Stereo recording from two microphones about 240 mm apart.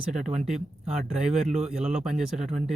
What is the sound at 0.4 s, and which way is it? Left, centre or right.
Speech, centre.